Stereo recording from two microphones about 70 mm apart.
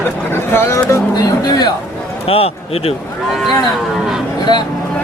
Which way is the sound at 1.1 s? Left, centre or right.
Left.